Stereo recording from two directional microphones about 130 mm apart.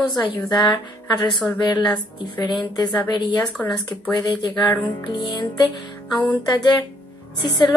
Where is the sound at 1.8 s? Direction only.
35° left (ahead or behind).